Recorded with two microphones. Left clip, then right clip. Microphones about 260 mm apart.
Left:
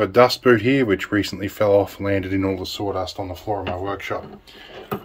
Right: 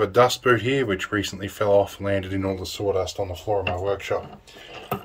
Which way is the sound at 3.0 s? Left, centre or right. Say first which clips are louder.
Even; left.